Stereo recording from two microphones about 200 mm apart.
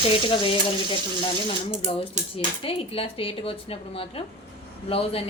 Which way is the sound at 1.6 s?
25° left (ahead or behind).